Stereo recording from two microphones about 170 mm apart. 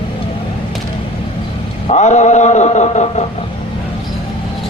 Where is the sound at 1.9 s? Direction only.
45° left (ahead or behind).